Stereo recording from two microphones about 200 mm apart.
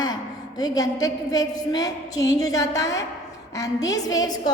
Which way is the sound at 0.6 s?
20° left (ahead or behind).